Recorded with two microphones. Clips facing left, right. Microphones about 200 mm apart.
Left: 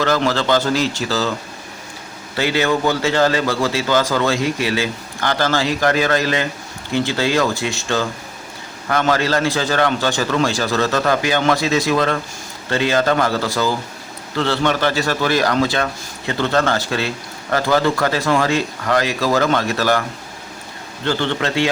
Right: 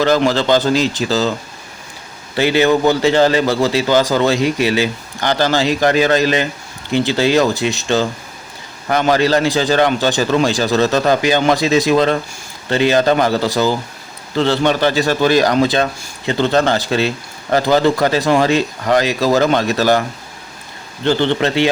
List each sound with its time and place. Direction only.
0.0 s speech: 15° right (ahead or behind)
2.3 s a man's voice: 20° right (ahead or behind)